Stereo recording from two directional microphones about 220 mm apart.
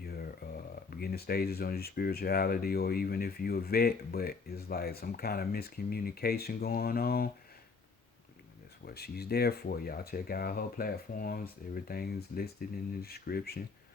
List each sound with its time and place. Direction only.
0.0 s a sound: 45° left (ahead or behind)
0.9 s speech: 45° left (ahead or behind)
8.9 s speech: 45° left (ahead or behind)